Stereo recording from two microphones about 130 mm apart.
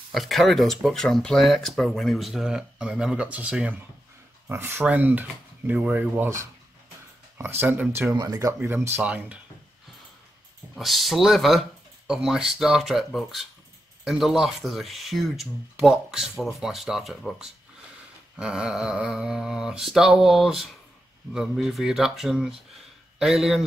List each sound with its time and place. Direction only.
0.1 s speech: centre (ahead or behind)
10.8 s speech: centre (ahead or behind)